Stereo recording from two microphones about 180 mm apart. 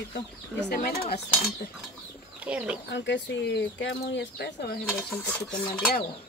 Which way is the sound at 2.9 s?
80° left.